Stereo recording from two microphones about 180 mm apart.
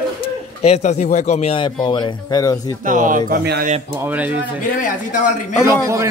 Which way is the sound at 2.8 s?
45° right (ahead or behind).